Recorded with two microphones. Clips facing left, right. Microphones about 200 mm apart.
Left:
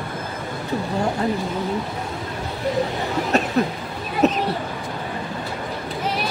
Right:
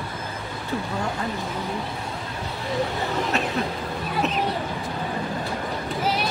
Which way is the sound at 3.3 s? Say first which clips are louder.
Left 5 dB; 40° left (ahead or behind).